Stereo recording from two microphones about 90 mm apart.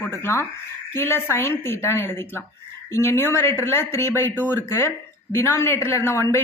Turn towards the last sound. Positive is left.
turn(degrees=30)  # may be behind; listen again after turning